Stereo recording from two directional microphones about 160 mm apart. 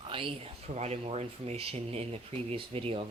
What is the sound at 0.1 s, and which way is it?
Speech, 35° right (ahead or behind).